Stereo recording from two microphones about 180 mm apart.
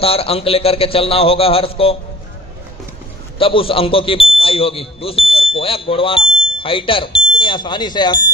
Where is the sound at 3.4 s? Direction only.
30° left (ahead or behind).